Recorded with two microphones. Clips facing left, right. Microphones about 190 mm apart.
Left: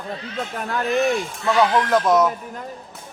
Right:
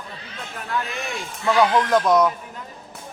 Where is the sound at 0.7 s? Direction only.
50° left (ahead or behind).